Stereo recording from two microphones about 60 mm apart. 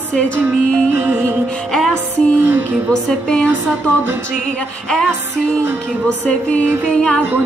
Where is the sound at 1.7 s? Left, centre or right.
Centre.